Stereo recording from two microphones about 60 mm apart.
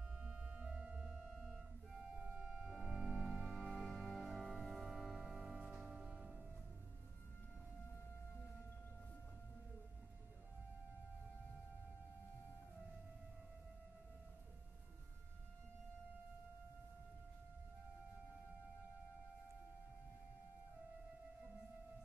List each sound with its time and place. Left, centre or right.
0.2 s music: centre
1.4 s music: centre